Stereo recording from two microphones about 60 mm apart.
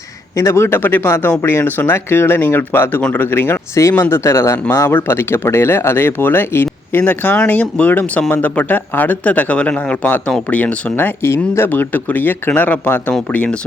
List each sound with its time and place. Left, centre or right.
0.3 s speech: left
3.8 s speech: left
11.2 s speech: left
11.7 s speech: left